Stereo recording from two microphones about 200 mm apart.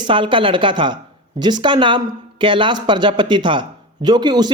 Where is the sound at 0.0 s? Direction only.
25° right (ahead or behind).